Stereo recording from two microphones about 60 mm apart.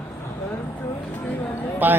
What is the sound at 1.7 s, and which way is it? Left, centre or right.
Speech, right.